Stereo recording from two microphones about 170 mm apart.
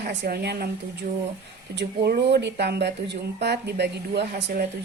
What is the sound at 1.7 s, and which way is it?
A woman's voice, 80° right.